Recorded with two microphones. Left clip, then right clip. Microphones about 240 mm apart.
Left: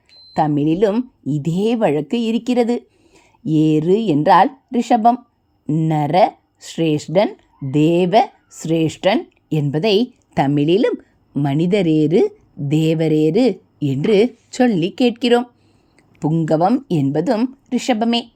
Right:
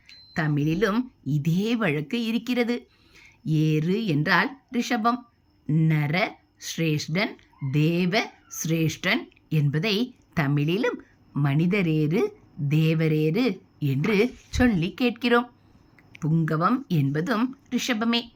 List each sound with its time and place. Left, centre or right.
0.3 s speech: centre
16.2 s speech: left
16.5 s speech: centre